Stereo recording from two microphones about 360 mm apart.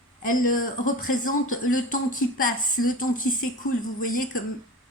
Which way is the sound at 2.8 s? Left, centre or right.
Left.